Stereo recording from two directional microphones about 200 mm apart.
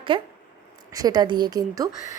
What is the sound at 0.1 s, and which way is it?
A woman's voice, 25° right (ahead or behind).